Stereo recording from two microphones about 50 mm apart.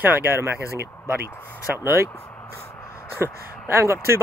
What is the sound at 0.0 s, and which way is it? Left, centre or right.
Speech, right.